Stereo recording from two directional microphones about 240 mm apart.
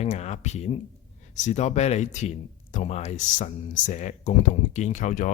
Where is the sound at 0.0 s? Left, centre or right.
Left.